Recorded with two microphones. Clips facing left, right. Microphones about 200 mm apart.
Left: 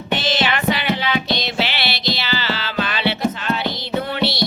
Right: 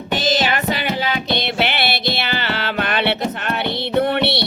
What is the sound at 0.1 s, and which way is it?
Music, 40° right (ahead or behind).